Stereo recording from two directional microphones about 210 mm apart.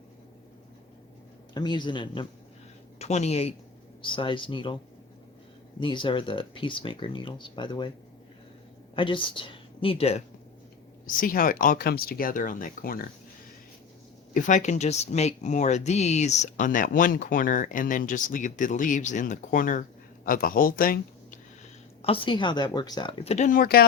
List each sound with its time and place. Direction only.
1.5 s speech: 20° left (ahead or behind)
5.8 s speech: 25° left (ahead or behind)
9.0 s speech: 25° left (ahead or behind)
11.0 s speech: 40° left (ahead or behind)
14.3 s speech: 35° left (ahead or behind)
22.0 s speech: 25° left (ahead or behind); by 23.8 s 45° left (ahead or behind)